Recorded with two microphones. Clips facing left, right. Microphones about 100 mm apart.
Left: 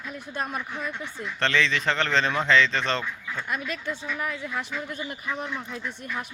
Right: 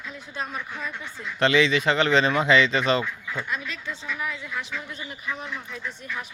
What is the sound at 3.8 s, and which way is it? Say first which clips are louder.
Speech: left 2 dB; 10° left (ahead or behind).